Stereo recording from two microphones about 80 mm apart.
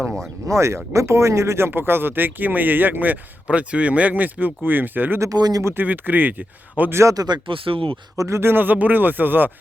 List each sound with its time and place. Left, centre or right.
0.0 s speech: centre
0.4 s speech: right
5.2 s speech: right
5.6 s speech: right
6.9 s speech: right
7.4 s speech: right
8.1 s speech: right